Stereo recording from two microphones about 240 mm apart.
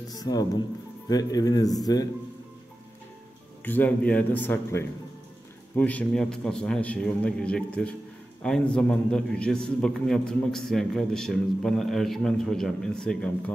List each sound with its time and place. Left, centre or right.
0.1 s a man's voice: centre
3.6 s a man's voice: centre